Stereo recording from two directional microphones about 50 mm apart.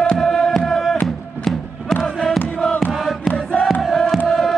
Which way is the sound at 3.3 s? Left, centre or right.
Left.